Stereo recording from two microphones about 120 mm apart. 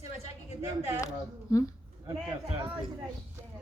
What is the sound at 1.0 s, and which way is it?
Speech, 25° left (ahead or behind).